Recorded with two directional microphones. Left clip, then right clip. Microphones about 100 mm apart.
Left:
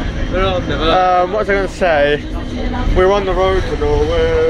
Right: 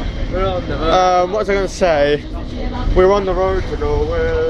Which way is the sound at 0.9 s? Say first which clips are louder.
Even; 50° right (ahead or behind).